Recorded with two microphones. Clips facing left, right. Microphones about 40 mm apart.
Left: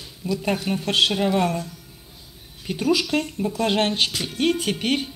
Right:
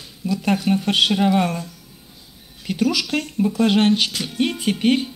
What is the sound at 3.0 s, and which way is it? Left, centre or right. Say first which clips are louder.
Speech: even; right.